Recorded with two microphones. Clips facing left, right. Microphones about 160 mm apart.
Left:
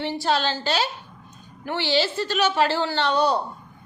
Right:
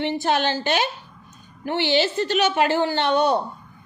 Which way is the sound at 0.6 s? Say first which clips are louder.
Right 2 dB; 15° right (ahead or behind).